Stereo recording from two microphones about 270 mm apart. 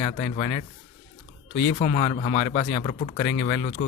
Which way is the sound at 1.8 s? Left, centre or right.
Left.